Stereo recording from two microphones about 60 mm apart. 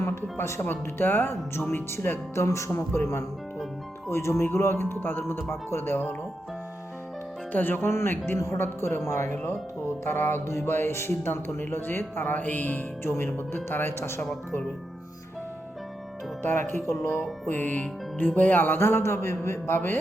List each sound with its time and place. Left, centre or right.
0.0 s speech: left
7.5 s speech: left
7.9 s speech: left
10.4 s speech: left
16.4 s speech: left
17.5 s speech: left